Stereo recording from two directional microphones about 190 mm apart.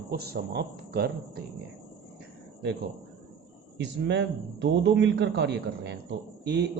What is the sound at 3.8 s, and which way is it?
A man's voice, 65° right (ahead or behind).